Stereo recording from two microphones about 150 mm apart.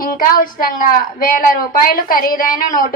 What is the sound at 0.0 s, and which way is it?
A woman's voice, 70° left (ahead or behind).